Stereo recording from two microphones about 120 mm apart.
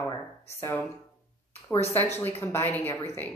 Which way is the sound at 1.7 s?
Centre (ahead or behind).